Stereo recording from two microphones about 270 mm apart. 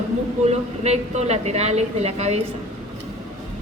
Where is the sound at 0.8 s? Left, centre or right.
Right.